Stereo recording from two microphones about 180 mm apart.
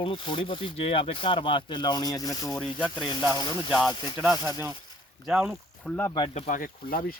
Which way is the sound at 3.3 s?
25° left (ahead or behind).